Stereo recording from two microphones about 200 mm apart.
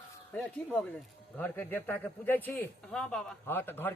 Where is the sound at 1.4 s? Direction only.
10° left (ahead or behind).